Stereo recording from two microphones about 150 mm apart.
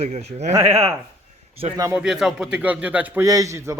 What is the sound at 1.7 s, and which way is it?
Speech, 20° right (ahead or behind).